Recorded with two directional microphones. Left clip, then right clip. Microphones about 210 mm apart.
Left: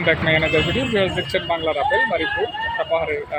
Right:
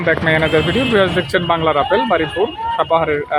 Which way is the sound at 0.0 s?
20° right (ahead or behind).